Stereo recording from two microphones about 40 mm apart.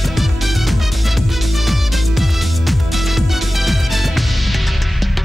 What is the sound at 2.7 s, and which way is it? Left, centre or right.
Music, centre.